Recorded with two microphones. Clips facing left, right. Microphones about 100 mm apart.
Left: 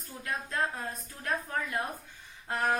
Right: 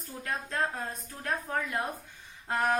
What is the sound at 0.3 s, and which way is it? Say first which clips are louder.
A woman's voice: even; 30° right (ahead or behind).